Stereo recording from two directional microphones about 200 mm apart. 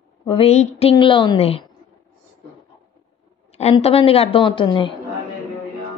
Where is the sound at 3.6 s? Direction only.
30° left (ahead or behind).